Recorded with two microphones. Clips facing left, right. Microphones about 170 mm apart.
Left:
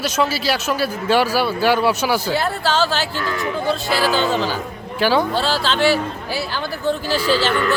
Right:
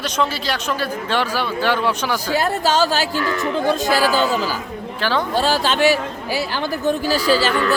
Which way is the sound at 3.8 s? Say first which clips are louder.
Right 1 dB; 40° right (ahead or behind).